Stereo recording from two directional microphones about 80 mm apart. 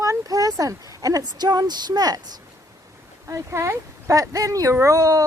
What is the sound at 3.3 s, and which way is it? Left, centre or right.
Speech, right.